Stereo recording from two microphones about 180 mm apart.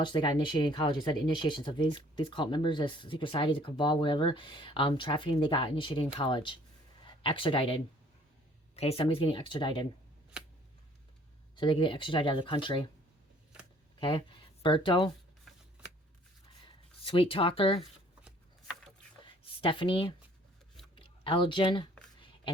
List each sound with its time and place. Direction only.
0.0 s speech: 25° left (ahead or behind)
11.5 s speech: 25° left (ahead or behind)
14.0 s speech: 30° left (ahead or behind)
17.0 s speech: 30° left (ahead or behind)
19.2 s a sound: 30° left (ahead or behind)